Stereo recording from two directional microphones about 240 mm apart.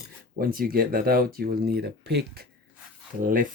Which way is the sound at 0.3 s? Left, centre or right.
Right.